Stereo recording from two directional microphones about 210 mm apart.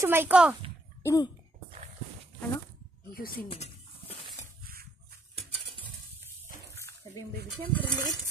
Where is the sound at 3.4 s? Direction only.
30° left (ahead or behind).